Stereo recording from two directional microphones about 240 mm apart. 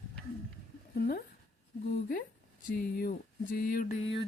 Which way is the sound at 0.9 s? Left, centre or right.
Left.